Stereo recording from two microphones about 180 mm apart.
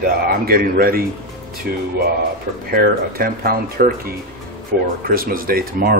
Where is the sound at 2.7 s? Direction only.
55° right (ahead or behind).